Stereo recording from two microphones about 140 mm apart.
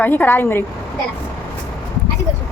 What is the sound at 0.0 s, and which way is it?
Speech, 15° left (ahead or behind).